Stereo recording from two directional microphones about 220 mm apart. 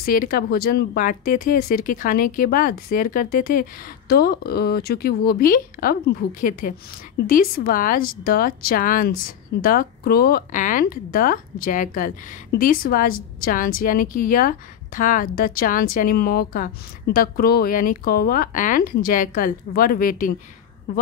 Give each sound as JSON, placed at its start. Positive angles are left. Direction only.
{"t": 0.0, "sound": "speech", "side_deg": 40}